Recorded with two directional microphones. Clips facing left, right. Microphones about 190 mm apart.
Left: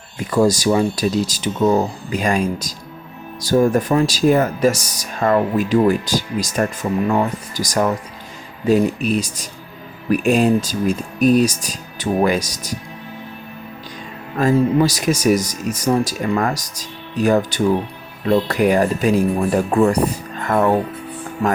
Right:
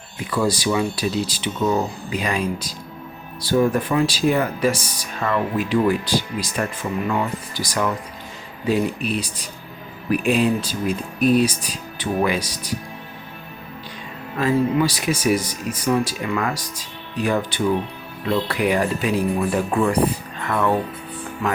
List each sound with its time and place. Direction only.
0.3 s speech: 45° left (ahead or behind)
14.3 s speech: 45° left (ahead or behind)